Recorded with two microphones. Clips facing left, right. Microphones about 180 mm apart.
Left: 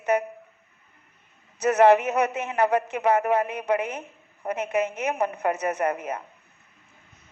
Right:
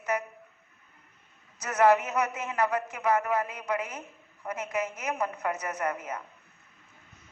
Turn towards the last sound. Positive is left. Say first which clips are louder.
# left 6 dB
turn(degrees=30)  # may be behind; listen again after turning